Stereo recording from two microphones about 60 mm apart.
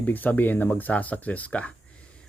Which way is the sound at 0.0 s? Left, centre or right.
Left.